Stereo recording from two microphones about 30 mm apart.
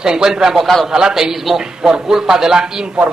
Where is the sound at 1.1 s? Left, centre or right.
Centre.